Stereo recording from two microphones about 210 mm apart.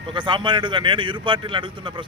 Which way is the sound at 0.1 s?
20° right (ahead or behind).